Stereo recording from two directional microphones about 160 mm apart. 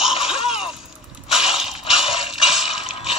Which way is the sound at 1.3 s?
Centre (ahead or behind).